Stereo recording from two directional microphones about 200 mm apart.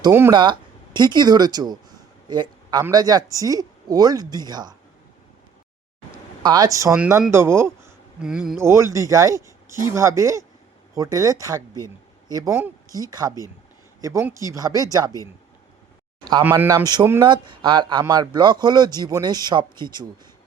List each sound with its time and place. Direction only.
0.1 s speech: 10° right (ahead or behind)
0.3 s speech: 25° right (ahead or behind)
6.4 s speech: 20° right (ahead or behind)
15.1 s speech: 15° left (ahead or behind)
16.4 s speech: 10° right (ahead or behind)